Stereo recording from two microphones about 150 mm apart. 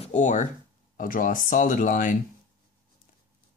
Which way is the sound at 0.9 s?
65° left (ahead or behind).